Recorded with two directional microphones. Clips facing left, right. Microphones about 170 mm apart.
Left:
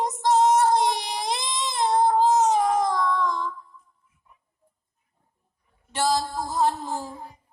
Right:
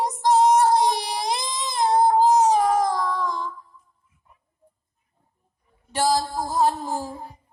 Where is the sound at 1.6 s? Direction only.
35° right (ahead or behind).